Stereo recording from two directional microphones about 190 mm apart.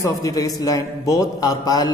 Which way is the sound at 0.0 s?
15° left (ahead or behind).